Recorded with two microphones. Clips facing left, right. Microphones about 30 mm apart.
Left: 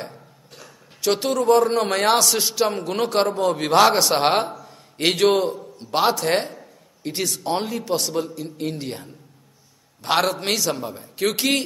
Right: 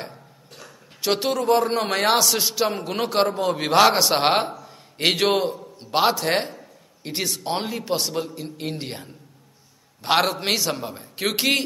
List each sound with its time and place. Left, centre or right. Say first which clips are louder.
0.0 s a man's voice: left 1 dB; centre
6.5 s a sound: left 1 dB; centre
7.6 s a man's voice: left 1 dB; centre